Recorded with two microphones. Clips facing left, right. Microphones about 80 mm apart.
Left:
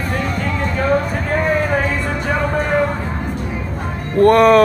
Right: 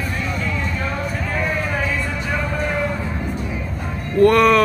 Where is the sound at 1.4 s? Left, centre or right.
Left.